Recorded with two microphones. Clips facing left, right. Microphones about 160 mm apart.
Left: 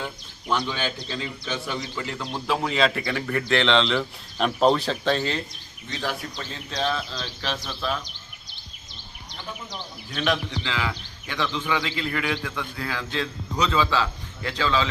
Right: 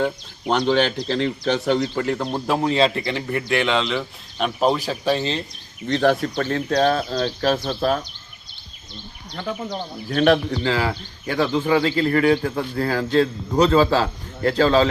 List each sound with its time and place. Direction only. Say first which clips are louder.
0.0 s speech: right 11 dB; 70° right (ahead or behind); by 2.2 s 50° right (ahead or behind)
2.6 s speech: right 4 dB; 30° right (ahead or behind); by 5.2 s 10° right (ahead or behind)
5.9 s a man's voice: right 12 dB; 65° right (ahead or behind); by 8.0 s 45° right (ahead or behind)
9.3 s a man's voice: right 10 dB; 60° right (ahead or behind); by 14.8 s 40° right (ahead or behind)